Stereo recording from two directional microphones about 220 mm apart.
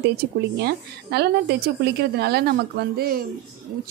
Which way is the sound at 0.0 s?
45° right (ahead or behind).